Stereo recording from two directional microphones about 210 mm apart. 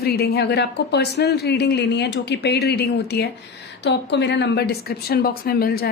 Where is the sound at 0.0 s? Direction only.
50° left (ahead or behind).